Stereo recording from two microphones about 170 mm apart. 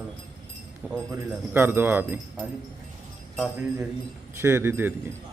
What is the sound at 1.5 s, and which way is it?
Speech, 10° right (ahead or behind).